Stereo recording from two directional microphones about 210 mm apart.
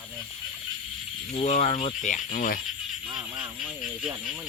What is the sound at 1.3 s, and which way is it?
Speech, 35° left (ahead or behind).